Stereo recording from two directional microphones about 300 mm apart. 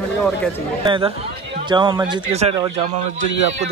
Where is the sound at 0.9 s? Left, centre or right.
Centre.